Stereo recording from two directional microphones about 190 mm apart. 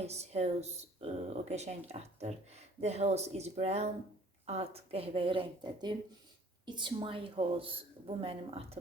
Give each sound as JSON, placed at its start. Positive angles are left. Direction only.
{"t": 0.0, "sound": "a woman's voice", "side_deg": -35}